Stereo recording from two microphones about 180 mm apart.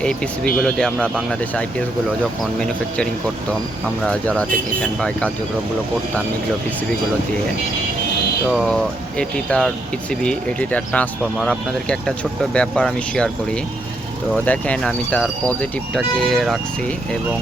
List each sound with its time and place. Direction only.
0.0 s speech: 5° left (ahead or behind)
8.5 s speech: 5° left (ahead or behind)